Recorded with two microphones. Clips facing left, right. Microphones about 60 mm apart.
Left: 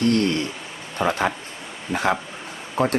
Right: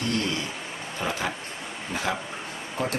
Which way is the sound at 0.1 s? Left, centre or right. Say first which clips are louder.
Left 7 dB; left.